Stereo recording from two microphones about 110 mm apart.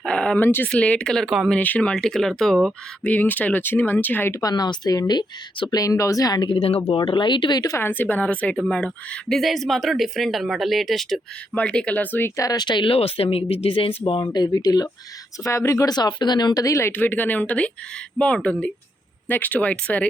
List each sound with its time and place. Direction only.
0.0 s speech: 10° left (ahead or behind)
1.5 s a woman's voice: 15° left (ahead or behind)
3.0 s speech: 15° left (ahead or behind)
4.4 s a woman's voice: 35° left (ahead or behind)
6.5 s speech: 60° left (ahead or behind); by 7.8 s 35° left (ahead or behind)
7.8 s a woman's voice: 15° left (ahead or behind); by 11.2 s centre (ahead or behind)
11.5 s speech: 10° left (ahead or behind)
12.4 s speech: 35° left (ahead or behind); by 14.3 s 55° left (ahead or behind)
14.3 s a woman's voice: 35° left (ahead or behind)
15.4 s speech: 25° left (ahead or behind)